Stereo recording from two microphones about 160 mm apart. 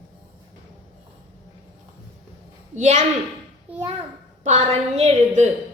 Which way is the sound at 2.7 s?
45° right (ahead or behind).